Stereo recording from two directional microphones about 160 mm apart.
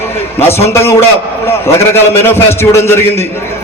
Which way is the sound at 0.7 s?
15° left (ahead or behind).